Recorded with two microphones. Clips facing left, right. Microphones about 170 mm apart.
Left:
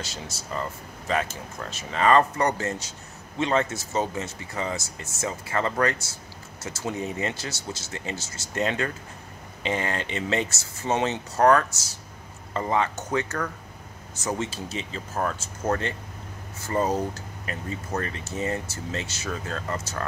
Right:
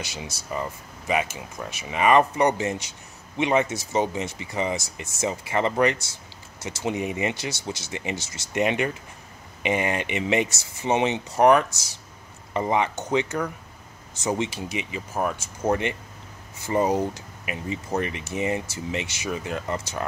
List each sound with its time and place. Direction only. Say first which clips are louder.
0.0 s speech: right 1 dB; 15° right (ahead or behind)